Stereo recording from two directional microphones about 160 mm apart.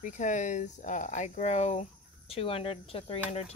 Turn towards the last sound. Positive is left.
turn(degrees=35)  # may be behind; listen again after turning